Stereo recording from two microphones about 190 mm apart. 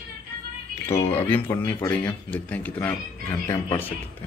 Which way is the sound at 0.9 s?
30° left (ahead or behind).